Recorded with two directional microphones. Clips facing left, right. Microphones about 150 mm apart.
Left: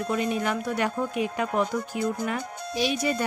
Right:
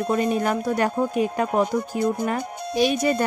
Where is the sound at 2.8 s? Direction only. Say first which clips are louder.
Right 6 dB; 50° right (ahead or behind).